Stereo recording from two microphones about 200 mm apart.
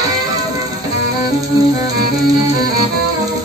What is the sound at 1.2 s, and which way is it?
Music, 20° right (ahead or behind).